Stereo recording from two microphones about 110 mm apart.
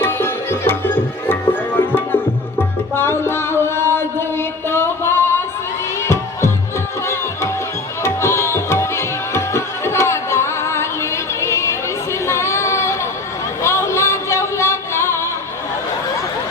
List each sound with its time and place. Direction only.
0.0 s music: 20° left (ahead or behind)
8.0 s tabla: 25° left (ahead or behind)
12.2 s a sound: 25° left (ahead or behind)
13.6 s music: 25° left (ahead or behind)